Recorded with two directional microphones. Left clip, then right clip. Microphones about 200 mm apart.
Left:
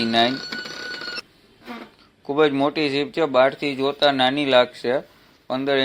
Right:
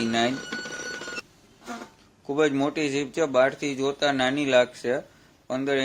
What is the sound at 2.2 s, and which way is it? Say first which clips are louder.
Speech: left 5 dB; 10° left (ahead or behind).